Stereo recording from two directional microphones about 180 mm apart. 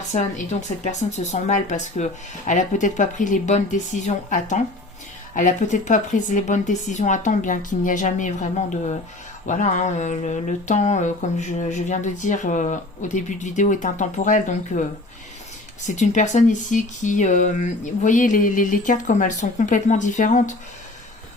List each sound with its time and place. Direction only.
0.9 s speech: 40° left (ahead or behind)
15.9 s speech: 40° left (ahead or behind)